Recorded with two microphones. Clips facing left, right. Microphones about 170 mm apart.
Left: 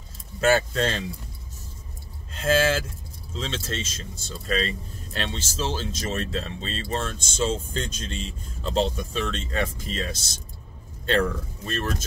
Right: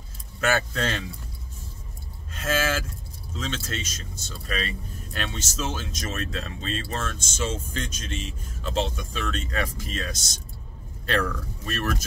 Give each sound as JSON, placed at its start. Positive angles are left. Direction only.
{"t": 0.4, "sound": "speech", "side_deg": 30}
{"t": 2.3, "sound": "speech", "side_deg": 30}